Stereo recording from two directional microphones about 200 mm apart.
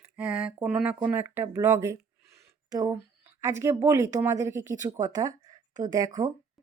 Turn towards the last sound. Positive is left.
turn(degrees=-15)  # may be behind; listen again after turning